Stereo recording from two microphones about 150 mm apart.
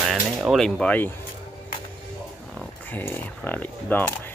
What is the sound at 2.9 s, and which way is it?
Speech, 15° left (ahead or behind).